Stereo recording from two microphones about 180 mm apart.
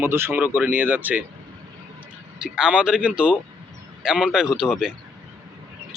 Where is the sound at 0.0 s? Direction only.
15° right (ahead or behind).